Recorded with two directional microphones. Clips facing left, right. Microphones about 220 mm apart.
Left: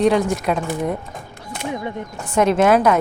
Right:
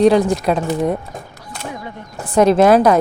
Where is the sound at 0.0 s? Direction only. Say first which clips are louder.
Right 4 dB; 35° right (ahead or behind).